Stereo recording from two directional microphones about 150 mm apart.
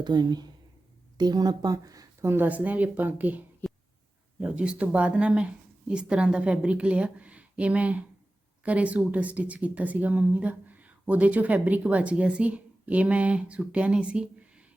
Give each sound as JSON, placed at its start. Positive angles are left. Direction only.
{"t": 0.0, "sound": "speech", "side_deg": -30}